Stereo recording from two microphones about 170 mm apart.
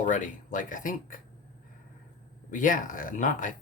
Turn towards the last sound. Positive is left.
turn(degrees=50)  # may be behind; listen again after turning